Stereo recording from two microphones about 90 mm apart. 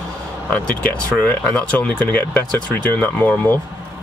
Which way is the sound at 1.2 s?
20° left (ahead or behind).